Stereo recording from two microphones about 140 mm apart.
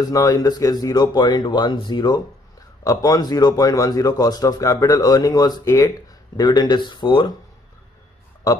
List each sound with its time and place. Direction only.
0.0 s speech: 25° left (ahead or behind)